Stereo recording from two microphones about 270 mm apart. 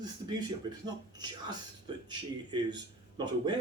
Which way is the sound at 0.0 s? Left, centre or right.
Centre.